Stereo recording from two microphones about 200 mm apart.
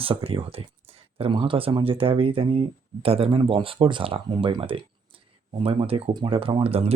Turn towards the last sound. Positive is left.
turn(degrees=-30)  # may be behind; listen again after turning